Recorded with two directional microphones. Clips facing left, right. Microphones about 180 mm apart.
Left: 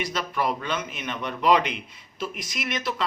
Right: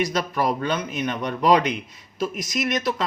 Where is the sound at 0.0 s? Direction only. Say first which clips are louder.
Right 4 dB; 40° right (ahead or behind).